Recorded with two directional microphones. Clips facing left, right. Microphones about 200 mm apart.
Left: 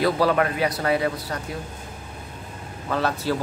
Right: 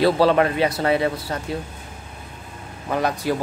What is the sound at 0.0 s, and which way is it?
A man's voice, 25° right (ahead or behind).